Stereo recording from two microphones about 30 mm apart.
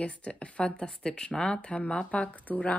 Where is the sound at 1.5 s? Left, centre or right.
Left.